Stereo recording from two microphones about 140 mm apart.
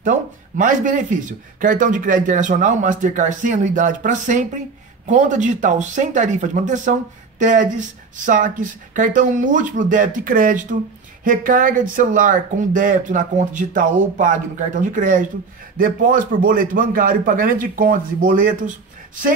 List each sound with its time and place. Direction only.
0.6 s speech: 65° right (ahead or behind)